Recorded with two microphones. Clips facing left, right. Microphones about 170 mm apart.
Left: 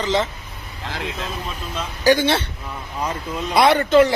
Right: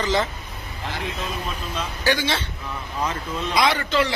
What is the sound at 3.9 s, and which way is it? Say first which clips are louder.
Speech: left 9 dB; 50° left (ahead or behind).